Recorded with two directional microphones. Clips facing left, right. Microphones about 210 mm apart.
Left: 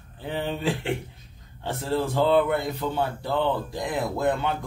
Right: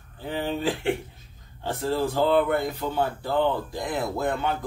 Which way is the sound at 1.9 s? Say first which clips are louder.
Even; centre (ahead or behind).